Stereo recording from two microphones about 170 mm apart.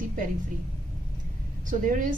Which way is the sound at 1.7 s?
50° right (ahead or behind).